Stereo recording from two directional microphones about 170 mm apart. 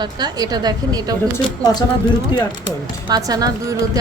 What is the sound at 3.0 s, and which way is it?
Speech, 20° right (ahead or behind).